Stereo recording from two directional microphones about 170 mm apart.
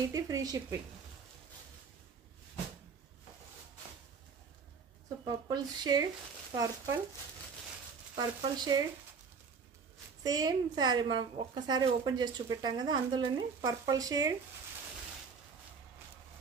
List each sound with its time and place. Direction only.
0.1 s speech: 20° right (ahead or behind)
5.5 s speech: 25° right (ahead or behind)
8.2 s speech: 20° right (ahead or behind)
10.2 s speech: 20° right (ahead or behind)